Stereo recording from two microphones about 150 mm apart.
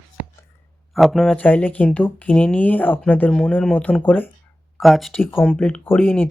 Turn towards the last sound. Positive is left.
turn(degrees=10)  # may be behind; listen again after turning